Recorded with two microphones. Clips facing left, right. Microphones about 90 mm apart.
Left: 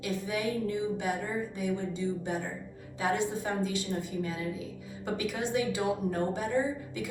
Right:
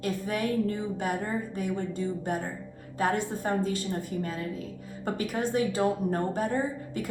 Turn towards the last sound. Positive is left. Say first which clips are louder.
# right 2 dB
turn(degrees=-45)  # may be behind; listen again after turning